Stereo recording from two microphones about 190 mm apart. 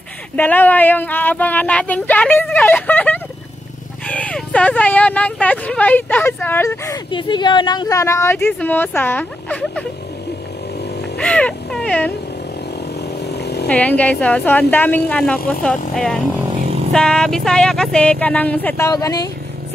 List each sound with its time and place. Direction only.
0.4 s speech: 10° left (ahead or behind)
11.1 s speech: 5° left (ahead or behind)
13.2 s chainsaw: 60° left (ahead or behind)
13.7 s speech: 5° left (ahead or behind)